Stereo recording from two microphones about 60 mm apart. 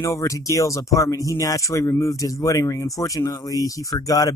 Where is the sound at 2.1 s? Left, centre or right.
Left.